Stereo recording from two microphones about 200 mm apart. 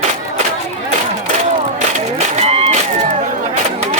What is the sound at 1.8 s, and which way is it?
Music, 35° right (ahead or behind).